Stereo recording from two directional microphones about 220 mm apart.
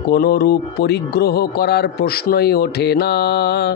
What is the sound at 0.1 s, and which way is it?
A man's voice, 45° left (ahead or behind).